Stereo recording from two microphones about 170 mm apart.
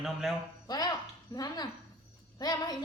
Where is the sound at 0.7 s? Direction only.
20° left (ahead or behind).